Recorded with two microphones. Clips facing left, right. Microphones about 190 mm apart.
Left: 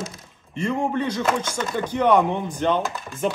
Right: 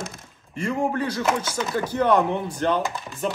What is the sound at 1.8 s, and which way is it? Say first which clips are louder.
Speech: left 2 dB; 15° left (ahead or behind).